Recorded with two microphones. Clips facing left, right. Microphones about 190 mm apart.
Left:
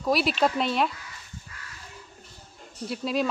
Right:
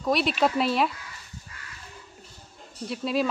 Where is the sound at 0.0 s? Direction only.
Centre (ahead or behind).